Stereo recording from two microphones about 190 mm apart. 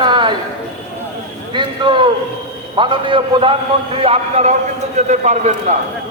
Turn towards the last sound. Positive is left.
turn(degrees=-40)  # may be behind; listen again after turning